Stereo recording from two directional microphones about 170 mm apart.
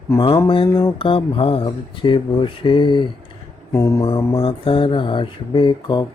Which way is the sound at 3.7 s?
15° left (ahead or behind).